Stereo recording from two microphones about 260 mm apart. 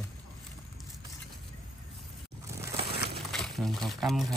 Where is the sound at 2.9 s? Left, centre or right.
Right.